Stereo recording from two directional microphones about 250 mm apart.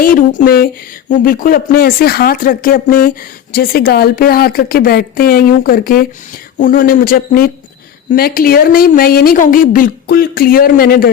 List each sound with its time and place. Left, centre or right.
0.0 s speech: left